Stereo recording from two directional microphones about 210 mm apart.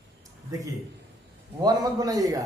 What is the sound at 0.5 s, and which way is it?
A man's voice, 15° right (ahead or behind).